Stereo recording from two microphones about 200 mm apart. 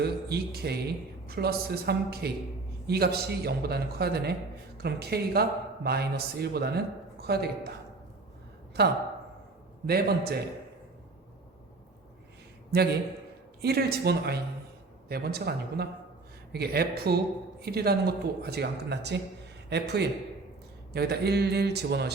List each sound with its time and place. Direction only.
0.0 s speech: 50° right (ahead or behind)
8.8 s speech: 55° right (ahead or behind)
13.6 s a man's voice: 55° right (ahead or behind)